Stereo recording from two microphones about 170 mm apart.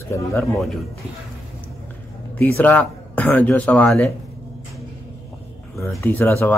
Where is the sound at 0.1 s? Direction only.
15° left (ahead or behind).